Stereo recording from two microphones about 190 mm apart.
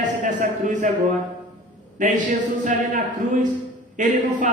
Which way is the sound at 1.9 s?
45° right (ahead or behind).